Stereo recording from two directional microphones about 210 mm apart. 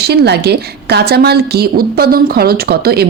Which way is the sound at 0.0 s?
50° right (ahead or behind).